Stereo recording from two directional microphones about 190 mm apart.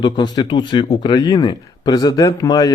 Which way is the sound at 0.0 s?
20° left (ahead or behind).